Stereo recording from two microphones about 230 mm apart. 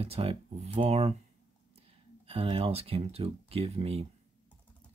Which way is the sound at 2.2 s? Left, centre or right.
Right.